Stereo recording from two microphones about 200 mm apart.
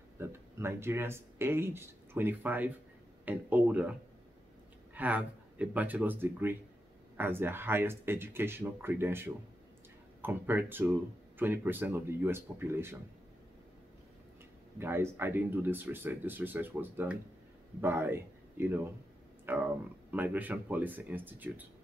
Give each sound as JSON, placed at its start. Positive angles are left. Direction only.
{"t": 0.2, "sound": "speech", "side_deg": -10}
{"t": 4.9, "sound": "speech", "side_deg": -10}
{"t": 14.8, "sound": "speech", "side_deg": -10}